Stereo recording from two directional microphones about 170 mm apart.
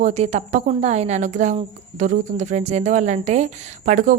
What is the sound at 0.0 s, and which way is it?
A woman's voice, 40° right (ahead or behind).